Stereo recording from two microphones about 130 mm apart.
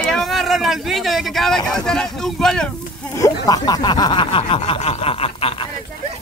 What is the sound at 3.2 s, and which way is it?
Speech, 30° left (ahead or behind).